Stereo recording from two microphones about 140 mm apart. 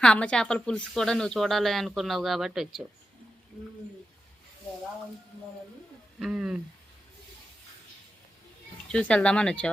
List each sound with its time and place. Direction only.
0.0 s speech: 5° left (ahead or behind)
6.1 s speech: 5° right (ahead or behind)
8.9 s speech: 10° left (ahead or behind)